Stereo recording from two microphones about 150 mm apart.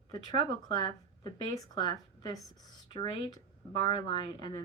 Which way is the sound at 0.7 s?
30° left (ahead or behind).